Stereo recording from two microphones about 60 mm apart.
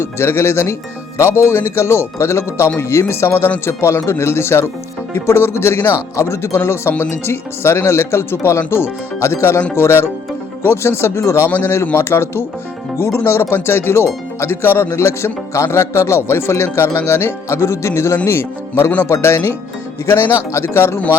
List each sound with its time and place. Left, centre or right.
0.0 s speech: left
11.4 s a man's voice: left
14.9 s speech: left